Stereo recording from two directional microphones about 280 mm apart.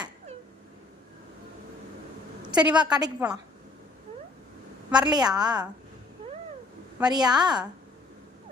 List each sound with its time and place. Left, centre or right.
2.4 s a sound: centre
2.8 s a woman's voice: centre
5.0 s a woman's voice: centre
7.0 s a woman's voice: centre